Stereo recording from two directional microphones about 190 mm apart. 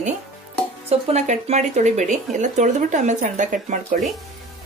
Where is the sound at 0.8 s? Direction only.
35° right (ahead or behind).